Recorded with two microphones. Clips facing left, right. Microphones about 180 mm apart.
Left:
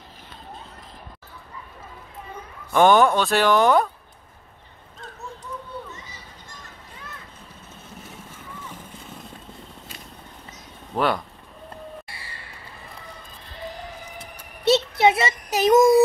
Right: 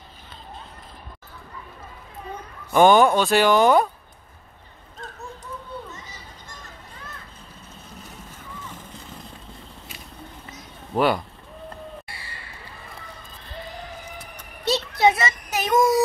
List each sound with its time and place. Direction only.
2.7 s speech: 5° right (ahead or behind)
11.0 s speech: 5° right (ahead or behind)
14.6 s a sound: 25° left (ahead or behind)